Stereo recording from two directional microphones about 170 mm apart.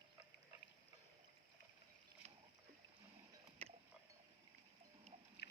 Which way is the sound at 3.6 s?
35° right (ahead or behind).